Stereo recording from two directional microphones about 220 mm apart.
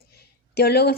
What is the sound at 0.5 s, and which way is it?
Speech, 45° left (ahead or behind).